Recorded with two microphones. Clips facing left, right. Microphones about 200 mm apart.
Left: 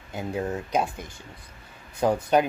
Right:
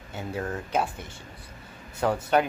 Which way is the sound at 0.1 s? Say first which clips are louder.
Left 3 dB; 15° left (ahead or behind).